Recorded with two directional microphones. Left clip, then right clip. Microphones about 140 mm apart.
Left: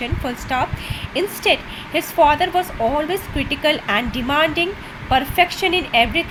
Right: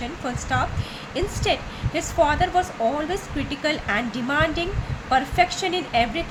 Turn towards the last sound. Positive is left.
turn(degrees=25)  # may be behind; listen again after turning